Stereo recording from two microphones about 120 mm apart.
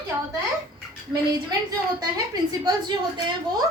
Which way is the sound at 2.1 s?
35° right (ahead or behind).